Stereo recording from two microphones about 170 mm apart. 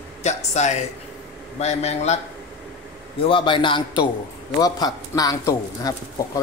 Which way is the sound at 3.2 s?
30° left (ahead or behind).